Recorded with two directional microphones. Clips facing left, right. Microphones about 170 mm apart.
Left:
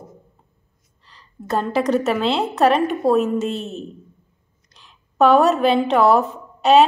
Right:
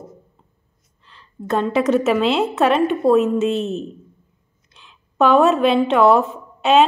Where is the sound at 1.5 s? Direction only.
Centre (ahead or behind).